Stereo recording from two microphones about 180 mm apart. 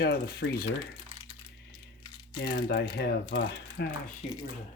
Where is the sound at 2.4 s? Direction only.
65° left (ahead or behind).